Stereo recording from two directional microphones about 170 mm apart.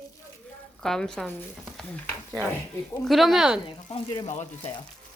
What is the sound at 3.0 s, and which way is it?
Speech, centre (ahead or behind).